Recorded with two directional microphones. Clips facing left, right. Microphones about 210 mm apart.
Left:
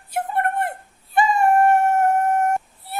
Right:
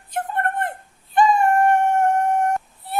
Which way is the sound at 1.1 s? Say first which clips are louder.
Right 1 dB; 5° left (ahead or behind).